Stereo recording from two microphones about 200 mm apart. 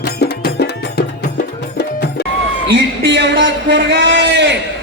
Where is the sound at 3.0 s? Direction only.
60° right (ahead or behind).